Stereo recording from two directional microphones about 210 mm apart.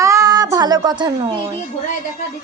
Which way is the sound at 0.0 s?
15° right (ahead or behind).